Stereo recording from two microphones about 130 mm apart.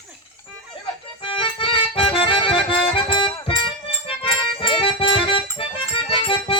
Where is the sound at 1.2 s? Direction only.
45° left (ahead or behind).